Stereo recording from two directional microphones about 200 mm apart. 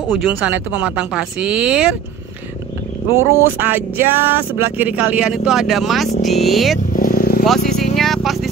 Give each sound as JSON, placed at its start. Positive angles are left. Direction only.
{"t": 0.1, "sound": "speech", "side_deg": 0}
{"t": 3.2, "sound": "speech", "side_deg": -10}
{"t": 6.9, "sound": "vehicle", "side_deg": 45}
{"t": 7.9, "sound": "vehicle", "side_deg": 0}